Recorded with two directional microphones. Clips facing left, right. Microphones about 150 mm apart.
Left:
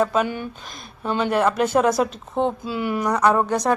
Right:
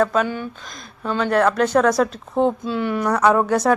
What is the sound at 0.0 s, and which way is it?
Speech, 5° left (ahead or behind).